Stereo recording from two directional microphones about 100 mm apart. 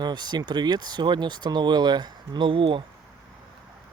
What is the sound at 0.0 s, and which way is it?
Speech, 45° right (ahead or behind).